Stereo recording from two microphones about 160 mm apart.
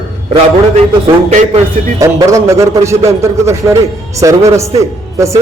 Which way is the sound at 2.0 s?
20° right (ahead or behind).